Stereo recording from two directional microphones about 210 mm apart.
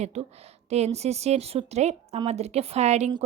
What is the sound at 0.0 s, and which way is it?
A woman's voice, 30° right (ahead or behind).